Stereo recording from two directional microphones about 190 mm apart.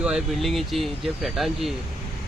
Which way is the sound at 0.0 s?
Centre (ahead or behind).